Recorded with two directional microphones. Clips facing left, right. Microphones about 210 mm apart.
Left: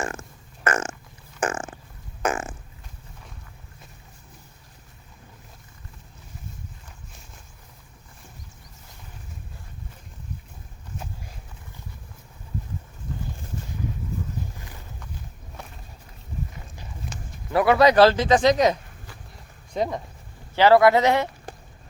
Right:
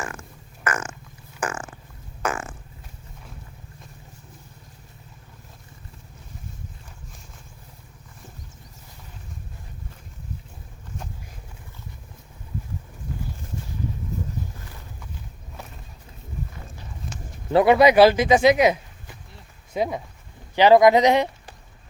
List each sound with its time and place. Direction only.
0.0 s burping: 25° left (ahead or behind)
1.4 s a sound: 25° left (ahead or behind)
2.2 s fart: 20° left (ahead or behind)
17.5 s speech: 25° right (ahead or behind)
17.7 s speech: 10° right (ahead or behind)
20.6 s speech: 15° right (ahead or behind)